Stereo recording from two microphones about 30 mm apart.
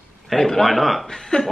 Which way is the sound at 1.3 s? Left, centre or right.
Left.